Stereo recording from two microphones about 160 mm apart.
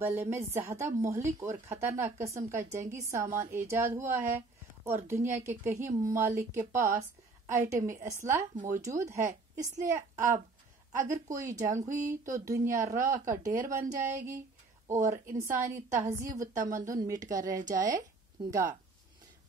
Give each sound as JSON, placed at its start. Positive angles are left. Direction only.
{"t": 0.0, "sound": "speech", "side_deg": -15}
{"t": 8.5, "sound": "speech", "side_deg": -55}
{"t": 8.8, "sound": "speech", "side_deg": -20}
{"t": 11.1, "sound": "speech", "side_deg": -20}
{"t": 16.5, "sound": "speech", "side_deg": -55}
{"t": 16.8, "sound": "speech", "side_deg": -20}